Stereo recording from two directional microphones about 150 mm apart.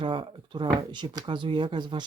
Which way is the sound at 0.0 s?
35° right (ahead or behind).